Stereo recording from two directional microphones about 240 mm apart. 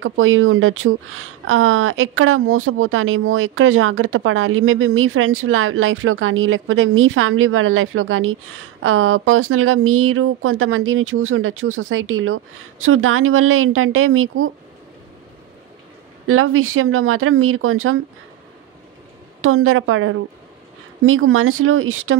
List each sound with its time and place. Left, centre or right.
0.0 s a woman's voice: right
16.3 s a woman's voice: right
19.4 s a woman's voice: right